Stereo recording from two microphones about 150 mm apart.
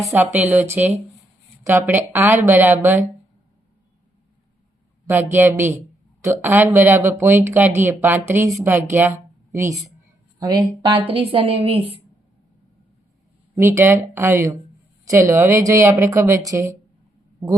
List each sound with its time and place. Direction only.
0.0 s speech: 15° right (ahead or behind)
5.0 s a woman's voice: 15° right (ahead or behind)
11.1 s a woman's voice: 40° right (ahead or behind)
13.6 s speech: 15° right (ahead or behind)